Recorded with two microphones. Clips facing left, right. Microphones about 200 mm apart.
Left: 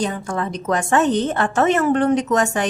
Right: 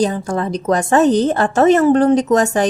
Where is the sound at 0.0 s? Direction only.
35° right (ahead or behind).